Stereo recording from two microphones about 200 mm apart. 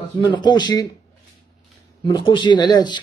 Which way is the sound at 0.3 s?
20° left (ahead or behind).